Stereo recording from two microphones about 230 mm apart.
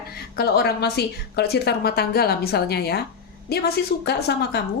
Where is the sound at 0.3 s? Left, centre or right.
Left.